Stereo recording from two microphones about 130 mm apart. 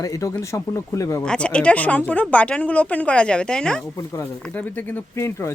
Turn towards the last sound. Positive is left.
turn(degrees=20)  # may be behind; listen again after turning